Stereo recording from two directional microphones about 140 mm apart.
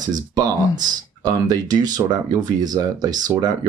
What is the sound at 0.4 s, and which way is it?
Speech, 30° right (ahead or behind).